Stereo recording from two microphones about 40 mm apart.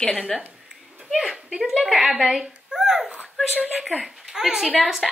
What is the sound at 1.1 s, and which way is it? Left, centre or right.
Speech, centre.